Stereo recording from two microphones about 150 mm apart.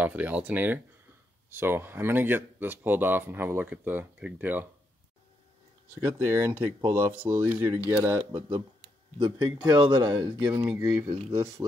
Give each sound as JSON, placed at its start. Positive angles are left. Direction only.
{"t": 0.0, "sound": "speech", "side_deg": -10}
{"t": 6.0, "sound": "speech", "side_deg": -15}
{"t": 8.2, "sound": "speech", "side_deg": -35}